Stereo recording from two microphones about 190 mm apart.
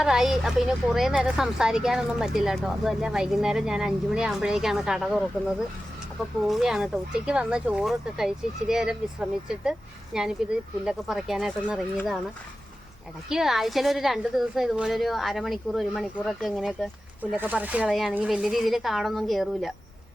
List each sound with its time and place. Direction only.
0.0 s a woman's voice: 5° right (ahead or behind)
13.2 s a woman's voice: centre (ahead or behind)